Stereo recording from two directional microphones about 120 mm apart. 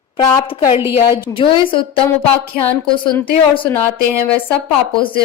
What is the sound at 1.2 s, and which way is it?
Speech, 45° left (ahead or behind).